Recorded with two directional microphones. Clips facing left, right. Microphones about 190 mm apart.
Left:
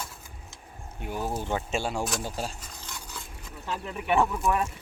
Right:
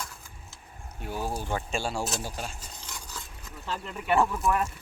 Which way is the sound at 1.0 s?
20° left (ahead or behind).